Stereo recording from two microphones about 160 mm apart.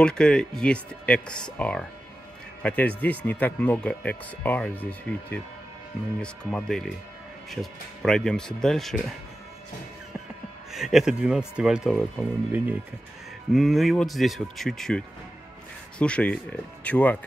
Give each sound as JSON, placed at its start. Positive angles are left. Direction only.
{"t": 0.0, "sound": "speech", "side_deg": 5}
{"t": 10.7, "sound": "speech", "side_deg": 0}